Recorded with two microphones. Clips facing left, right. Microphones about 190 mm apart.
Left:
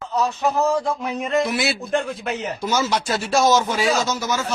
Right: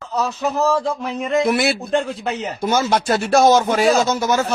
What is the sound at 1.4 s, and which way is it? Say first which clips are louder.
A man's voice: right 5 dB; 55° right (ahead or behind).